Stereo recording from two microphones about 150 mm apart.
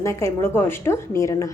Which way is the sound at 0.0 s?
20° left (ahead or behind).